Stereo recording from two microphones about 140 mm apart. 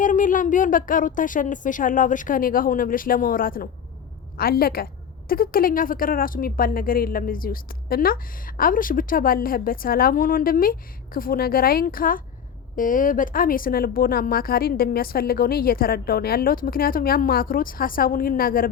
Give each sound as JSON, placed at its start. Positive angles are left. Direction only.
{"t": 0.0, "sound": "a woman's voice", "side_deg": 70}
{"t": 12.7, "sound": "a woman's voice", "side_deg": 75}